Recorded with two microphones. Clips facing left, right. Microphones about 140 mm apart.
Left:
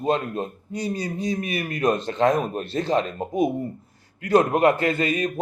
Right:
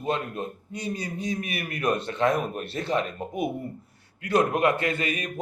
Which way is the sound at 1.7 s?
25° left (ahead or behind).